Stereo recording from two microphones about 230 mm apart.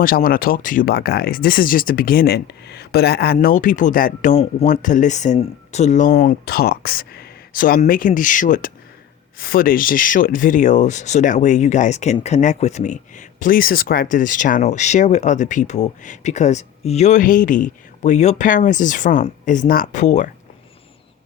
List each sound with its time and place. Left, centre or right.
0.0 s speech: left